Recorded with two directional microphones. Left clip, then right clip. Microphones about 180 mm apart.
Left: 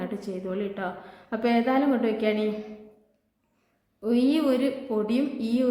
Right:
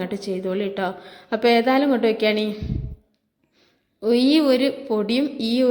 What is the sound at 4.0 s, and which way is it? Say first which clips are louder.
A woman's voice: right 6 dB; 40° right (ahead or behind).